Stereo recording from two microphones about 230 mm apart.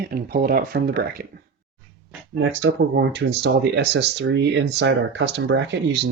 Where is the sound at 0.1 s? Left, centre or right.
Right.